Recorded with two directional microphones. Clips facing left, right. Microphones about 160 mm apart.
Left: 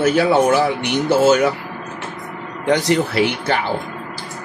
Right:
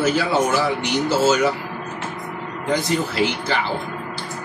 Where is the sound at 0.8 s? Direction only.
55° left (ahead or behind).